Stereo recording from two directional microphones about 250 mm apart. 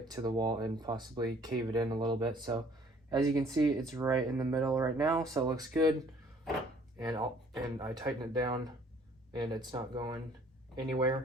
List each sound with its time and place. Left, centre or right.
0.0 s speech: centre
7.0 s speech: centre